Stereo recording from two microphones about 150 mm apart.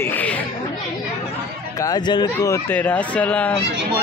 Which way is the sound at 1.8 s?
25° left (ahead or behind).